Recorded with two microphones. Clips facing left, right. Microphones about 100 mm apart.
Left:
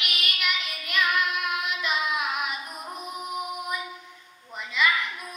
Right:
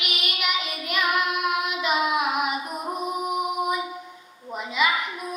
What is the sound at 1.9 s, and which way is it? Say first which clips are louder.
Child singing: right 6 dB; 45° right (ahead or behind).